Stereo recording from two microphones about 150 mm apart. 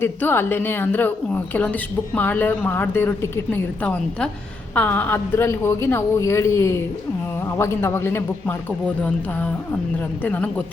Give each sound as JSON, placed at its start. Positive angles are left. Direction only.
{"t": 0.0, "sound": "a woman's voice", "side_deg": 15}
{"t": 10.2, "sound": "a woman's voice", "side_deg": 10}